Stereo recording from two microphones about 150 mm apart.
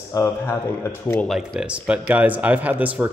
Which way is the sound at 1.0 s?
5° left (ahead or behind).